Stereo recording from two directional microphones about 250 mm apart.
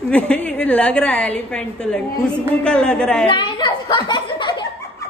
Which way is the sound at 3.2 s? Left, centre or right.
Centre.